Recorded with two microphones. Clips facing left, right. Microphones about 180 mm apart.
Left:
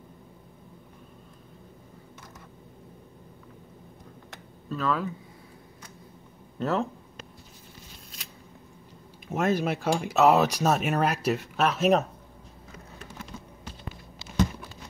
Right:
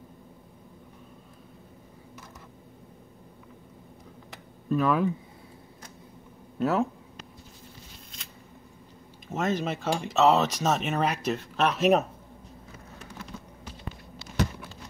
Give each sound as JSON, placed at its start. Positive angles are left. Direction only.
{"t": 4.6, "sound": "speech", "side_deg": -15}
{"t": 6.6, "sound": "speech", "side_deg": -5}
{"t": 9.3, "sound": "speech", "side_deg": 10}